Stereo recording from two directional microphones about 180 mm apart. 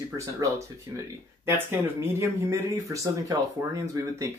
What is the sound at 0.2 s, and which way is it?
Speech, 15° right (ahead or behind).